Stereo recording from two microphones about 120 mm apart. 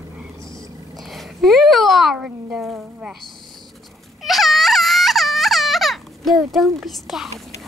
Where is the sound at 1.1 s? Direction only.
Centre (ahead or behind).